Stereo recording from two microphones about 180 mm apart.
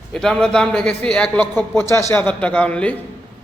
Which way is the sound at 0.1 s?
5° left (ahead or behind).